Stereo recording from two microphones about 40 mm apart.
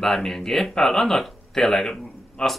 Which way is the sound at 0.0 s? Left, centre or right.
Centre.